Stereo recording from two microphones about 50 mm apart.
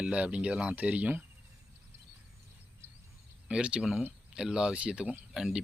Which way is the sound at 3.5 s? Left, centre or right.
Right.